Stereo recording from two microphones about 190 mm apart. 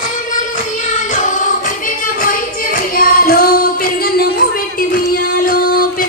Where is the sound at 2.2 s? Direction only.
50° left (ahead or behind).